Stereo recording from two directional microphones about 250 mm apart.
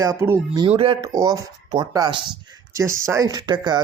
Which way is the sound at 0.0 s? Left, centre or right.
Centre.